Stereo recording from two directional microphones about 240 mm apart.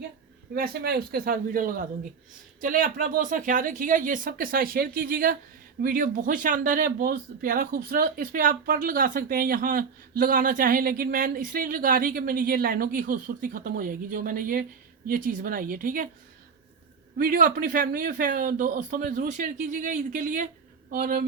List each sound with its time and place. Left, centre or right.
0.5 s speech: right
17.2 s speech: right